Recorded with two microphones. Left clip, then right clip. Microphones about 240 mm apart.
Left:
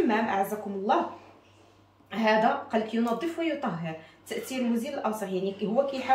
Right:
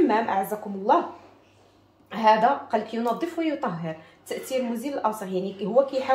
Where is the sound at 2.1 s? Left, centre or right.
Right.